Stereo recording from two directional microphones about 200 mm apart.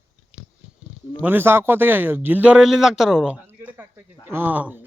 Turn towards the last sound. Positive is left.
turn(degrees=-10)  # may be behind; listen again after turning